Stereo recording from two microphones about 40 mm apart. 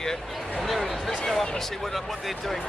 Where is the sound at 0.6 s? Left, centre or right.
Centre.